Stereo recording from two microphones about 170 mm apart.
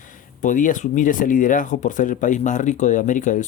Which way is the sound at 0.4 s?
50° left (ahead or behind).